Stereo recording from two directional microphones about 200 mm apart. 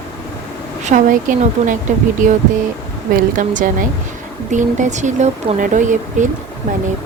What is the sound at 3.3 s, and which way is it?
Speech, 40° right (ahead or behind).